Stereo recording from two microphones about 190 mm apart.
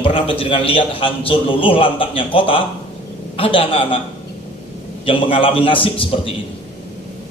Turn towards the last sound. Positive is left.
turn(degrees=30)  # may be behind; listen again after turning